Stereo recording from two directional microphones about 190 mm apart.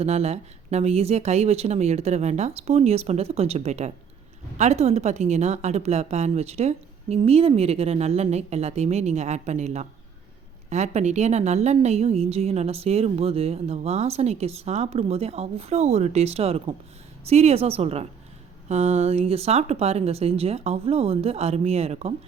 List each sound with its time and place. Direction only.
0.0 s a woman's voice: 35° right (ahead or behind)